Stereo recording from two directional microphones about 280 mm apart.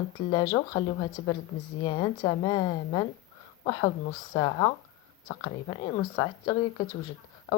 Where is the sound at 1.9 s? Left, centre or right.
Centre.